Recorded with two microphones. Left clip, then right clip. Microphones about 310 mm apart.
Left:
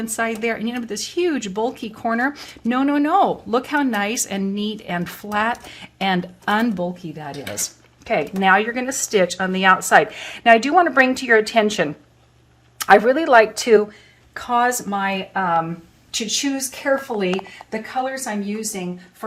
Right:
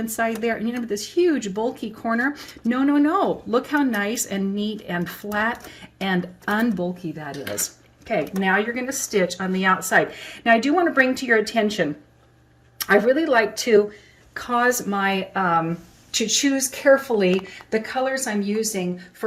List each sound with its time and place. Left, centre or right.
0.0 s speech: centre